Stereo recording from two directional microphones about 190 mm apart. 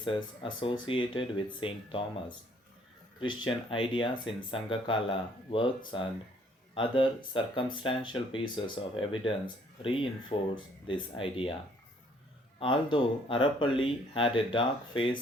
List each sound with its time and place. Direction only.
0.0 s speech: 25° left (ahead or behind)
3.2 s speech: 25° left (ahead or behind)
12.5 s speech: 25° left (ahead or behind)